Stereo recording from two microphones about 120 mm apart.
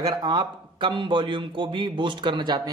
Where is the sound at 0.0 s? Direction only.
35° right (ahead or behind).